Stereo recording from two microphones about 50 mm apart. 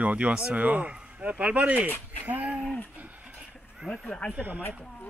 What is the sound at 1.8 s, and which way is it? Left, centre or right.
Speech, left.